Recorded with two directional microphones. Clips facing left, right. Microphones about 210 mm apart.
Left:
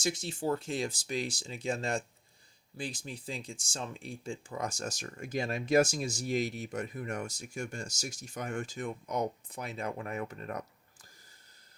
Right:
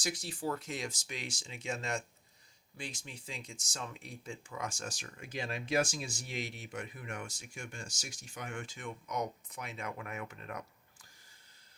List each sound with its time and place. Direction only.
0.0 s speech: 25° left (ahead or behind)